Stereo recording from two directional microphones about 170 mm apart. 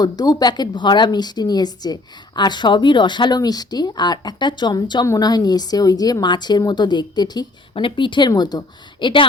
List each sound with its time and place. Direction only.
0.0 s speech: 25° left (ahead or behind)